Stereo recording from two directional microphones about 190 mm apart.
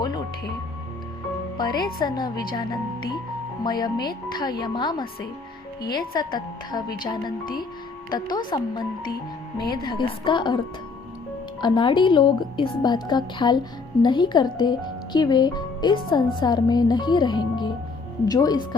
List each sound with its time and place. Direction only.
1.5 s speech: 20° left (ahead or behind)
9.6 s speech: 55° left (ahead or behind)
9.8 s speech: 25° left (ahead or behind)
11.6 s speech: 25° left (ahead or behind)